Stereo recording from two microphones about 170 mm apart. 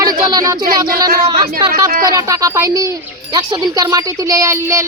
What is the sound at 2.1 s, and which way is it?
Speech, 20° right (ahead or behind).